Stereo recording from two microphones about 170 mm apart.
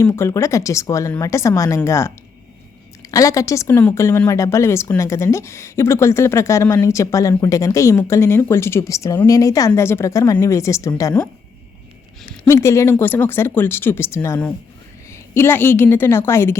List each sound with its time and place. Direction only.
0.0 s speech: 15° left (ahead or behind)
12.5 s speech: 15° left (ahead or behind)